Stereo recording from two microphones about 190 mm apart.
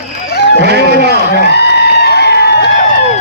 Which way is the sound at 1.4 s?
65° left (ahead or behind).